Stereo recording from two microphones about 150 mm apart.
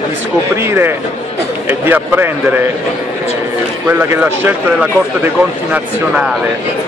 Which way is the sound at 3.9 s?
15° right (ahead or behind).